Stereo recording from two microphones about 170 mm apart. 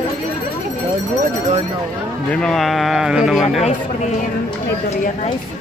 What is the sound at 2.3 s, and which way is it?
Speech, 5° left (ahead or behind).